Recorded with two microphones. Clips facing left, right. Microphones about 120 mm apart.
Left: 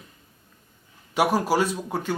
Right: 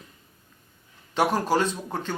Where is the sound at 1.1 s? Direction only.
10° left (ahead or behind).